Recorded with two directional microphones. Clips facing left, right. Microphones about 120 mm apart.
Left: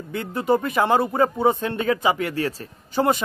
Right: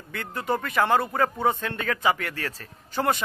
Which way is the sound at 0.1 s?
20° left (ahead or behind).